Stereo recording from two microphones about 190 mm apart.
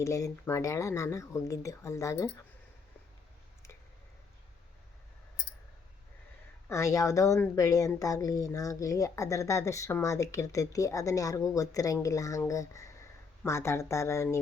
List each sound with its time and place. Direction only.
0.0 s speech: 15° left (ahead or behind)
6.7 s speech: 15° left (ahead or behind)